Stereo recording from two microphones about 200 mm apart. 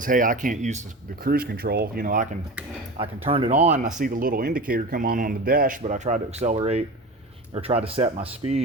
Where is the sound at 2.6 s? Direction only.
5° right (ahead or behind).